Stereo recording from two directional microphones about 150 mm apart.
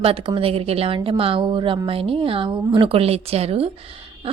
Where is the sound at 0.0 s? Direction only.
40° right (ahead or behind).